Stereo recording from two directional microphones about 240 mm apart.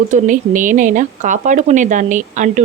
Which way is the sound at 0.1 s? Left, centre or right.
Right.